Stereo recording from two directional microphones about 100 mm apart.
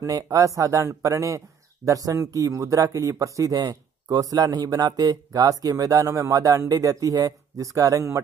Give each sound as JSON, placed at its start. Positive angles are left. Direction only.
{"t": 0.0, "sound": "speech", "side_deg": -35}